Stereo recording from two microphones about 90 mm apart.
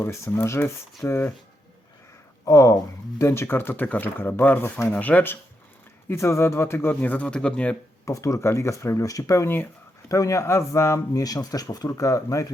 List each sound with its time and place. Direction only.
0.0 s speech: 25° left (ahead or behind)
2.4 s speech: 40° left (ahead or behind)
3.2 s speech: 30° left (ahead or behind)
6.1 s speech: 30° left (ahead or behind); by 7.8 s 15° left (ahead or behind)
8.0 s speech: 35° left (ahead or behind)